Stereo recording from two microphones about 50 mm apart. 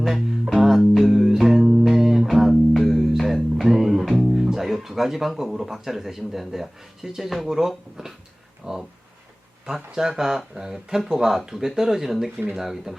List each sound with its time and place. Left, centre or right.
0.0 s music: centre
4.5 s speech: centre
9.9 s speech: centre